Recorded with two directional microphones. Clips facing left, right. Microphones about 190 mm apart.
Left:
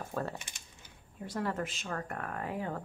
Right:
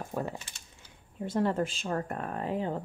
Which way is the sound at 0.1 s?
15° right (ahead or behind).